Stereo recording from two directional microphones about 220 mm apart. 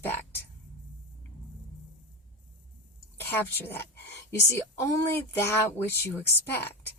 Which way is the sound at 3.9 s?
50° left (ahead or behind).